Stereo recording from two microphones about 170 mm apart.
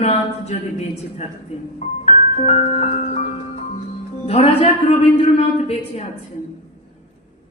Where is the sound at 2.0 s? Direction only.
40° left (ahead or behind).